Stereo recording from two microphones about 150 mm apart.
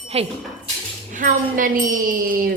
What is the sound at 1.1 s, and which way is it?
Speech, 60° right (ahead or behind).